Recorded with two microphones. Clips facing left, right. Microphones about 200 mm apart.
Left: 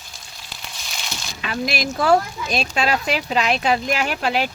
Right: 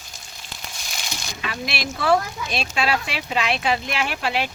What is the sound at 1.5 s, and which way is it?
Speech, 40° left (ahead or behind).